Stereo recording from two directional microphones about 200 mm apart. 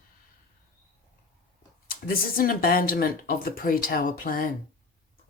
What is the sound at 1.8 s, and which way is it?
Speech, 45° left (ahead or behind).